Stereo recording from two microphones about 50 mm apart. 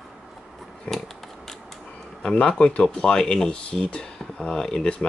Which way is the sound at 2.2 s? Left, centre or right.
Left.